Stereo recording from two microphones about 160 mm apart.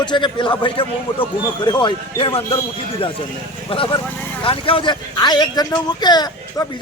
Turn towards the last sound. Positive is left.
turn(degrees=25)  # may be behind; listen again after turning